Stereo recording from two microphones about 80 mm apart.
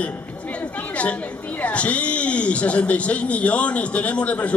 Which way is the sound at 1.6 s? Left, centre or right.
Centre.